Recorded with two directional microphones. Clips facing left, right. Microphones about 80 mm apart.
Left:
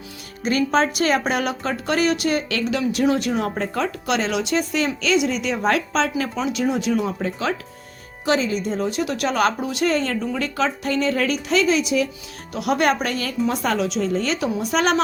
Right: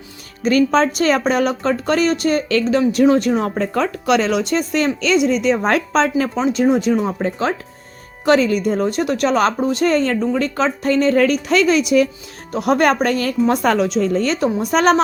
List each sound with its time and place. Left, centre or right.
0.4 s a woman's voice: right
8.2 s a woman's voice: right
12.5 s a woman's voice: right